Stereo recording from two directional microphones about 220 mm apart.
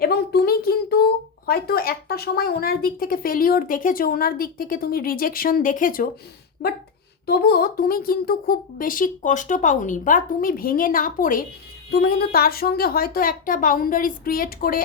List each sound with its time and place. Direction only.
0.0 s speech: 45° left (ahead or behind)
7.3 s speech: 45° left (ahead or behind)